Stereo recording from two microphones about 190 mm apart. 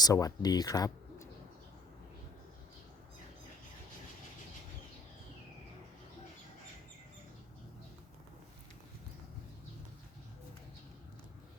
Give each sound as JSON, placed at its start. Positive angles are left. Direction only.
{"t": 0.0, "sound": "speech", "side_deg": 20}